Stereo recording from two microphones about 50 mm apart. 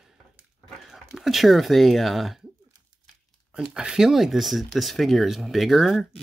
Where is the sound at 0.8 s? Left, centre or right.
Centre.